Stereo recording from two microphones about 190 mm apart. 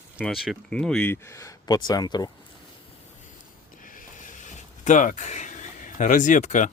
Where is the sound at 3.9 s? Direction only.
45° left (ahead or behind).